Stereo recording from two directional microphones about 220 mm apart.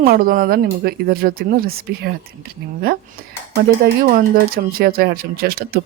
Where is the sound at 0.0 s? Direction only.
40° right (ahead or behind).